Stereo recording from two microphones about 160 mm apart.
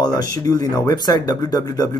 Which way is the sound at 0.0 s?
25° left (ahead or behind).